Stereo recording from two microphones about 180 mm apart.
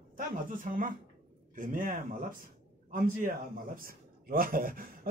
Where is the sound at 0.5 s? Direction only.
50° right (ahead or behind).